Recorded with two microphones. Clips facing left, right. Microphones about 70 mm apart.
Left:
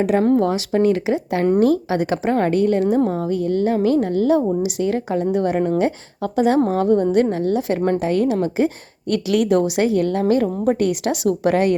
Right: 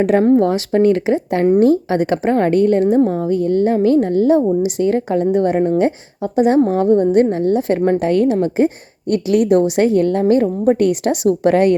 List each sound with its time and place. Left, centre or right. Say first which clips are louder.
0.0 s a woman's voice: right 4 dB; right
7.9 s a woman's voice: right 4 dB; right